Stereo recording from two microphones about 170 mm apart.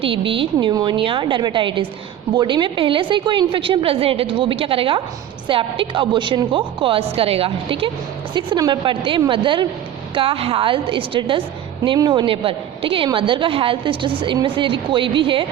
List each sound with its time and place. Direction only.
0.0 s a woman's voice: 30° right (ahead or behind)